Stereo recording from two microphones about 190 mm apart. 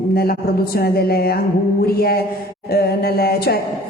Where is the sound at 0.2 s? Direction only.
55° left (ahead or behind).